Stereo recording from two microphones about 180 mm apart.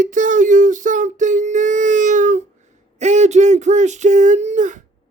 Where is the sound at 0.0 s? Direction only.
45° right (ahead or behind).